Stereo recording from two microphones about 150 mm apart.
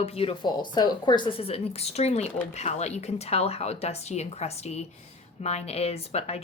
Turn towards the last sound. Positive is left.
turn(degrees=45)  # may be behind; listen again after turning